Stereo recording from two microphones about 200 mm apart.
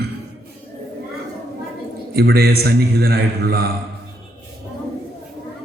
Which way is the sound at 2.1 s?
50° right (ahead or behind).